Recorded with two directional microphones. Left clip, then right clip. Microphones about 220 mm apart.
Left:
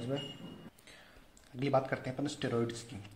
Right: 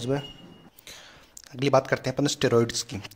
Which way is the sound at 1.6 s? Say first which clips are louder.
Right 10 dB; 35° right (ahead or behind).